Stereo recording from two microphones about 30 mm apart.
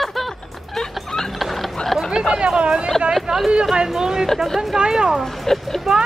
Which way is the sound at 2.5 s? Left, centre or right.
Right.